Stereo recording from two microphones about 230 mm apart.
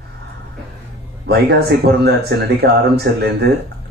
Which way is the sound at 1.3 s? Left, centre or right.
Right.